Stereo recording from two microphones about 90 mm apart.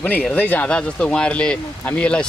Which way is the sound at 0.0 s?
15° left (ahead or behind).